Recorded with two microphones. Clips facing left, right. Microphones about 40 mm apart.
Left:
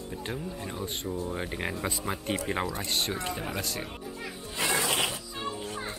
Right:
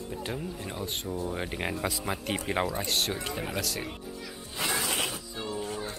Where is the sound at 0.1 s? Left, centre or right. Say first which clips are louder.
Even; centre.